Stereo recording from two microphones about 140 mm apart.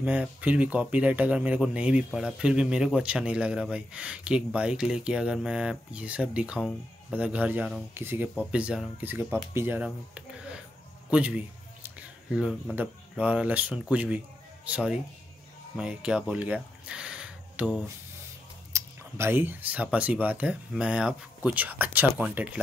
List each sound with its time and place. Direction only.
0.0 s speech: 10° right (ahead or behind)
9.8 s a sound: 5° right (ahead or behind)
13.2 s speech: 10° right (ahead or behind)
18.7 s speech: 20° right (ahead or behind)